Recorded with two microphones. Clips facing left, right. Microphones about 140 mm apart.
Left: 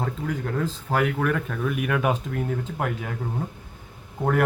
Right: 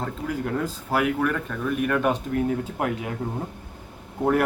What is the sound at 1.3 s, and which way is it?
Speech, 5° left (ahead or behind).